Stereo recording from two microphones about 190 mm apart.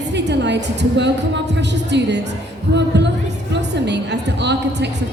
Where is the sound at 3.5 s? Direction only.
65° right (ahead or behind).